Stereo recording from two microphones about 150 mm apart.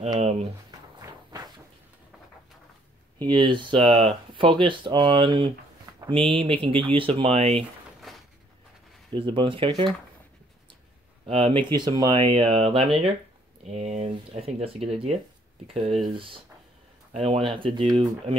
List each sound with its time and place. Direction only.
0.2 s speech: 45° right (ahead or behind)
3.2 s speech: 30° right (ahead or behind)
8.1 s a sound: centre (ahead or behind)
9.1 s speech: 35° right (ahead or behind)
11.2 s speech: 35° right (ahead or behind)
13.7 s speech: 50° right (ahead or behind)
17.1 s speech: 45° right (ahead or behind)